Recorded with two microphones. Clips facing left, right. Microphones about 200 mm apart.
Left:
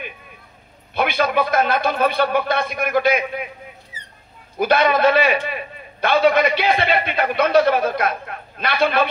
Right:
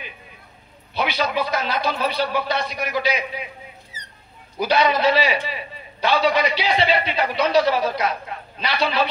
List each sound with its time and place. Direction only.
0.9 s a man's voice: 55° left (ahead or behind)
3.9 s a sound: 40° right (ahead or behind)
4.6 s a man's voice: 55° left (ahead or behind)